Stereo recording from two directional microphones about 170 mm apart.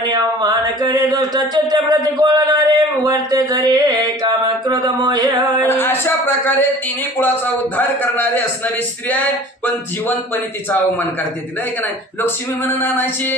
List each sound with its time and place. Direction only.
0.1 s a sound: 25° right (ahead or behind)
5.7 s speech: 15° left (ahead or behind)
7.7 s a man's voice: 10° left (ahead or behind)
11.8 s a man's voice: 10° left (ahead or behind)